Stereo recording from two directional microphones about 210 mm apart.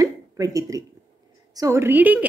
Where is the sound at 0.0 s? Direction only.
15° right (ahead or behind).